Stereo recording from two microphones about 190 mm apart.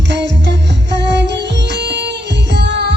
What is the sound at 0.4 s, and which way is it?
Music, 65° right (ahead or behind).